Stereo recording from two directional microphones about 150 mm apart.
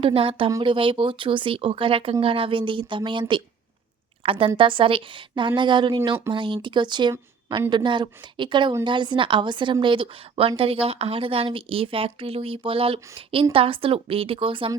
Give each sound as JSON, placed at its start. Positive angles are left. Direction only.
{"t": 0.0, "sound": "a woman's voice", "side_deg": -40}